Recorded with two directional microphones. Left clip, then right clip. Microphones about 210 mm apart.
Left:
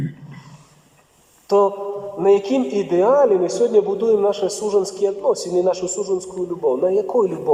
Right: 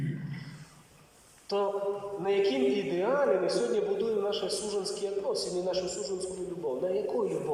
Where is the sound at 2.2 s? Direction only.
50° left (ahead or behind).